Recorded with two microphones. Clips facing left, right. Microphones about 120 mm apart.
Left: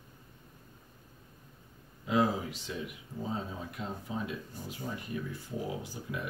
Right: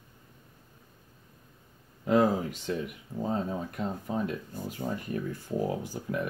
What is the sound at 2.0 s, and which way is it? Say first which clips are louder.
Speech: right 5 dB; 50° right (ahead or behind).